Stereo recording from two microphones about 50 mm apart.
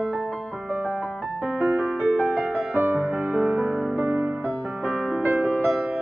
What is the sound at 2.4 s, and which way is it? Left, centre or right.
Music, right.